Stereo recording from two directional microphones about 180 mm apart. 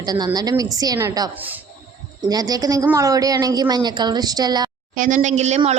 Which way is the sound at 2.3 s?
20° right (ahead or behind).